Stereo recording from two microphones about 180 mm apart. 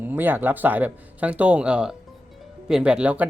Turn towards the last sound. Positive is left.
turn(degrees=-10)  # may be behind; listen again after turning